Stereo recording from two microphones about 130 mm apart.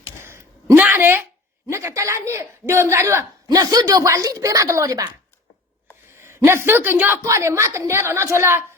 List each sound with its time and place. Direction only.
0.2 s a sound: 20° right (ahead or behind)
1.6 s a man's voice: 25° right (ahead or behind)
6.1 s a man's voice: 20° right (ahead or behind)